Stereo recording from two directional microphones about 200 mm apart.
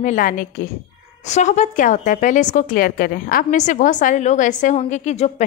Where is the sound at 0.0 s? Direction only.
40° left (ahead or behind).